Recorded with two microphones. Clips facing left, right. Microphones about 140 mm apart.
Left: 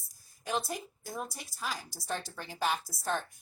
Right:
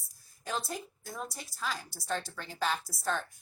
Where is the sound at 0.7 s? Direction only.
15° left (ahead or behind).